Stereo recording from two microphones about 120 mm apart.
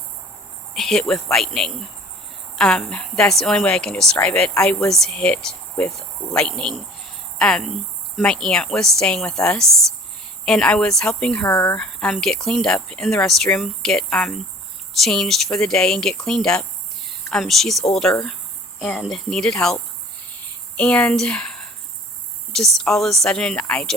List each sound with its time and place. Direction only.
0.7 s a woman's voice: 5° left (ahead or behind)
11.4 s speech: 20° left (ahead or behind)
11.8 s speech: 5° left (ahead or behind)